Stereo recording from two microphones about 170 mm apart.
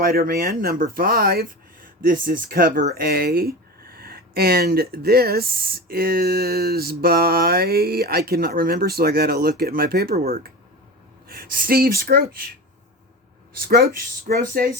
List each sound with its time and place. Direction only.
0.0 s speech: 55° right (ahead or behind)
13.5 s speech: 60° right (ahead or behind)